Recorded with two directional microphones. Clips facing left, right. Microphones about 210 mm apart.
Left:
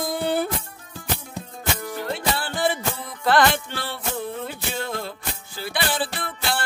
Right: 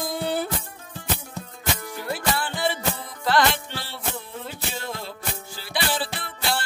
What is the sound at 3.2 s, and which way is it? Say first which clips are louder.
Music: left 3 dB; 55° left (ahead or behind).